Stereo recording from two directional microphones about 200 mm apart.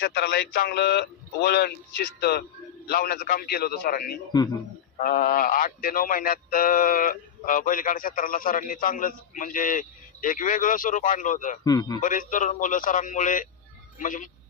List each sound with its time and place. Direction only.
0.0 s speech: 45° left (ahead or behind)
2.8 s speech: 50° left (ahead or behind)
11.6 s a man's voice: 20° left (ahead or behind)
12.0 s a man's voice: 40° left (ahead or behind)